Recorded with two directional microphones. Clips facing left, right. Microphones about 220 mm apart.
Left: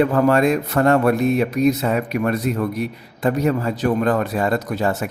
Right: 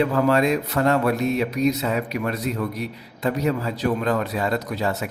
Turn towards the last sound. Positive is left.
turn(degrees=50)  # may be behind; listen again after turning